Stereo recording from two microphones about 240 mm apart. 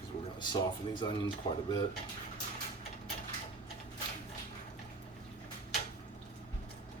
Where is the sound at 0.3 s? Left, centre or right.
Centre.